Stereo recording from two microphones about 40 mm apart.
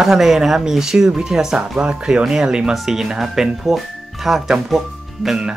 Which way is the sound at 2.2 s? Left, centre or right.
Centre.